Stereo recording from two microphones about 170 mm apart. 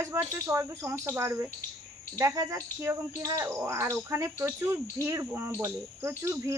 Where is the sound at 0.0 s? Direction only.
15° right (ahead or behind).